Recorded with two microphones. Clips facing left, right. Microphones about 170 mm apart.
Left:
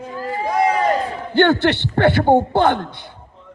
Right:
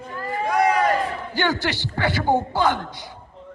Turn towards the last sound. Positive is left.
turn(degrees=60)  # may be behind; listen again after turning